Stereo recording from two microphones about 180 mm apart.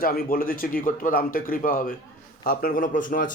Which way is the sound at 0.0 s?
55° left (ahead or behind).